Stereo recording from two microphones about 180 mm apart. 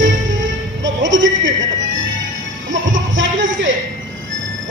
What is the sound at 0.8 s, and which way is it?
Music, 90° right.